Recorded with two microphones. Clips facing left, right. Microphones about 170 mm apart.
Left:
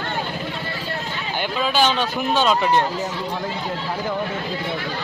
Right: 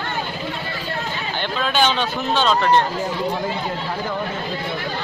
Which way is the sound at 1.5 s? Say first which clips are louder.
Even; 5° left (ahead or behind).